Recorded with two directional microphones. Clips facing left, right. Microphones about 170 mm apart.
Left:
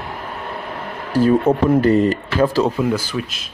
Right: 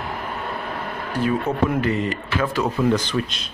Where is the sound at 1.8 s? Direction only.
40° left (ahead or behind).